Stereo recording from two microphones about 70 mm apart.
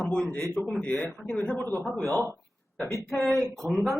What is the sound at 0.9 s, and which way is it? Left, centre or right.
Speech, centre.